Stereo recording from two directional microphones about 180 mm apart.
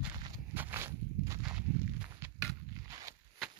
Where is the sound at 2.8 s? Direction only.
20° right (ahead or behind).